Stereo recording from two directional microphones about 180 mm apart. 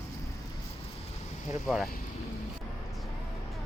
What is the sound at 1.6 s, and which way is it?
Speech, centre (ahead or behind).